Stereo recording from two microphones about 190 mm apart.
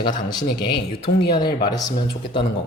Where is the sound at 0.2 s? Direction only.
20° left (ahead or behind).